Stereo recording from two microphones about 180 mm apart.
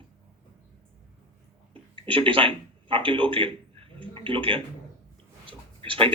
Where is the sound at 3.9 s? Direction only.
30° right (ahead or behind).